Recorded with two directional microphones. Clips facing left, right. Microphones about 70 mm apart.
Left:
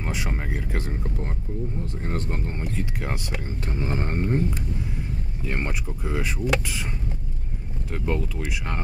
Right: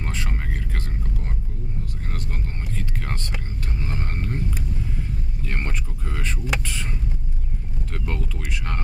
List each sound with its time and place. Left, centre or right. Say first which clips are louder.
0.0 s a sound: left 2 dB; centre
2.0 s speech: left 7 dB; left; by 3.8 s centre
3.8 s speech: left 5 dB; left; by 6.9 s centre
7.9 s speech: left 5 dB; centre